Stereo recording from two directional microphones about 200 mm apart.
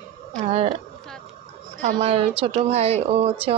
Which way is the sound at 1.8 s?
35° right (ahead or behind).